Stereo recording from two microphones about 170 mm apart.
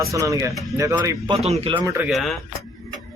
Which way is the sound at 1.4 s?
35° right (ahead or behind).